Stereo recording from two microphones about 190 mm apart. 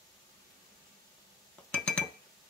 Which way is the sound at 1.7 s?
5° left (ahead or behind).